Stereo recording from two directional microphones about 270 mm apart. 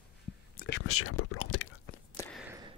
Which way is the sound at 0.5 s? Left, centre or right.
Left.